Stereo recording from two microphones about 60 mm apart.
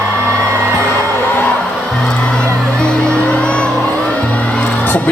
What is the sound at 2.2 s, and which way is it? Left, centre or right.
Music, centre.